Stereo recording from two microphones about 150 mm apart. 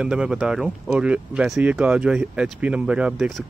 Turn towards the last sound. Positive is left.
turn(degrees=0)  # may be behind; listen again after turning